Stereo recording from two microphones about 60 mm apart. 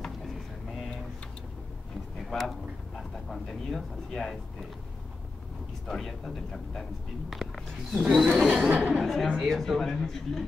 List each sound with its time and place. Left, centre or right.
2.2 s a sound: centre
3.0 s speech: centre
5.9 s speech: centre
7.5 s speech: centre
8.5 s speech: right
9.0 s speech: centre